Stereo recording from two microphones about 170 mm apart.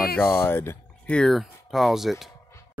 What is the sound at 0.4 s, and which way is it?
Speech, 15° left (ahead or behind).